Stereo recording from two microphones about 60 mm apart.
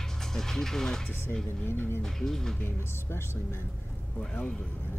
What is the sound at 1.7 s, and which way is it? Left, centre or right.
Speech, left.